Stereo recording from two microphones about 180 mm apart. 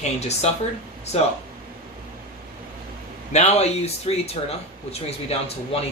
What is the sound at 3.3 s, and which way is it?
Speech, 35° left (ahead or behind).